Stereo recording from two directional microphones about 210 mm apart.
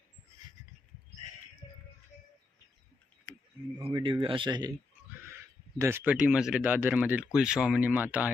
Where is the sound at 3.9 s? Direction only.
25° right (ahead or behind).